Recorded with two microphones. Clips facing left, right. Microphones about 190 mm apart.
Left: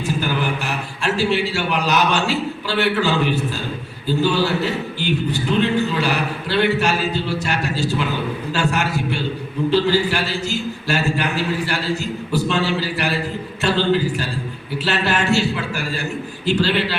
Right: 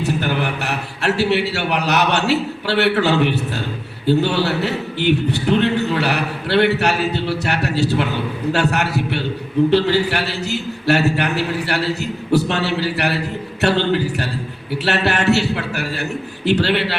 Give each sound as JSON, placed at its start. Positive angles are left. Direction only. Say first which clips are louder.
{"t": 0.0, "sound": "a man's voice", "louder": "right 2 dB", "side_deg": -65}